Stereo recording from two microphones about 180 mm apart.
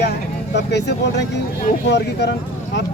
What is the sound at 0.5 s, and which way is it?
Speech, 70° left (ahead or behind).